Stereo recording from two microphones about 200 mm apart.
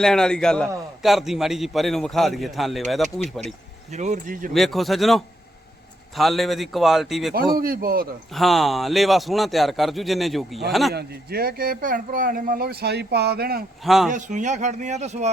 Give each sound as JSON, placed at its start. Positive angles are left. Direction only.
{"t": 0.0, "sound": "a man's voice", "side_deg": 5}
{"t": 3.9, "sound": "speech", "side_deg": -35}
{"t": 4.5, "sound": "a man's voice", "side_deg": 0}
{"t": 7.3, "sound": "speech", "side_deg": -50}
{"t": 8.3, "sound": "a man's voice", "side_deg": 0}
{"t": 10.9, "sound": "speech", "side_deg": -50}
{"t": 13.8, "sound": "a man's voice", "side_deg": 0}
{"t": 14.1, "sound": "speech", "side_deg": -40}